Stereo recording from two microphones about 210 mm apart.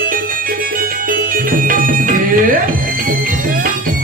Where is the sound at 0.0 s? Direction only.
40° right (ahead or behind).